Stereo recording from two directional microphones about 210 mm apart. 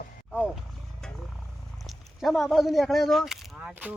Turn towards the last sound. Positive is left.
turn(degrees=-5)  # may be behind; listen again after turning